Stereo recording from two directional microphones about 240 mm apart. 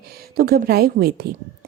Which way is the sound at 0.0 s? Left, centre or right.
Right.